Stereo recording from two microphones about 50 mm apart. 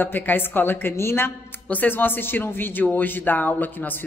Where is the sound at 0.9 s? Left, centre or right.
Left.